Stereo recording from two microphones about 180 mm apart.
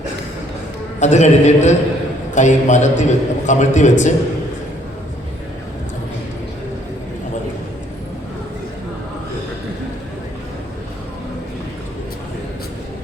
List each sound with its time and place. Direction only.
0.9 s a man's voice: 40° left (ahead or behind)